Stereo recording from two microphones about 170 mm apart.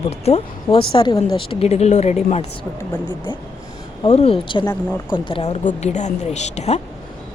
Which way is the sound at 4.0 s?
35° left (ahead or behind).